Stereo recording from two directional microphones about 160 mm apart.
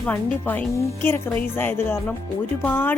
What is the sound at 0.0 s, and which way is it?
A woman's voice, 10° left (ahead or behind).